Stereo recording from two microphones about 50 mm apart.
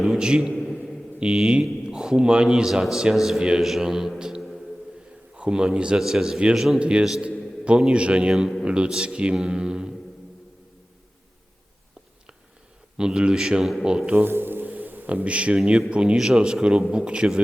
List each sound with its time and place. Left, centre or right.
0.2 s a man's voice: centre
0.8 s mantra: centre
1.9 s a man's voice: centre
4.4 s music: centre
5.4 s speech: centre
6.0 s a man's voice: centre
6.7 s a man's voice: right
13.0 s a man's voice: centre
14.2 s music: right
15.1 s speech: right
16.1 s a man's voice: centre